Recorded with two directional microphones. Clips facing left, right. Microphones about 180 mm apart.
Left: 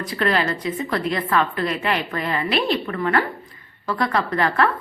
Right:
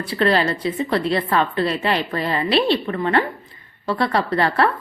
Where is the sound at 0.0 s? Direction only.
30° right (ahead or behind).